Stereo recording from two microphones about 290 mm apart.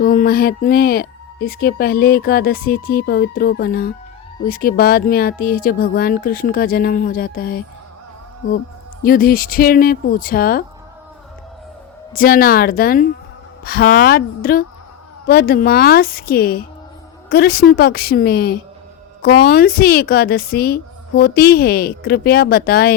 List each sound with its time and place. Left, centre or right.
0.0 s speech: left
9.0 s speech: left
12.1 s speech: left